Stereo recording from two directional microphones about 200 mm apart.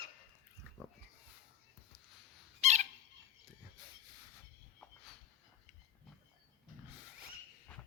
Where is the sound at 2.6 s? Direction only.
35° right (ahead or behind).